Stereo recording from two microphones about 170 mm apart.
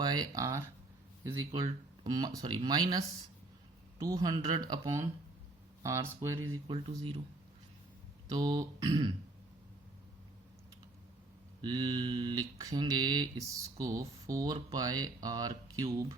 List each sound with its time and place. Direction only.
0.0 s speech: 25° right (ahead or behind)
2.0 s speech: 25° right (ahead or behind)
4.0 s speech: 20° right (ahead or behind)
6.7 s speech: 35° right (ahead or behind)
8.3 s speech: 25° right (ahead or behind)
11.6 s speech: 25° right (ahead or behind)